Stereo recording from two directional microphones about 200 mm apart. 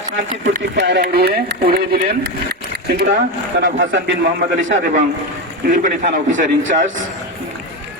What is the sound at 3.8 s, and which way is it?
Speech, 65° right (ahead or behind).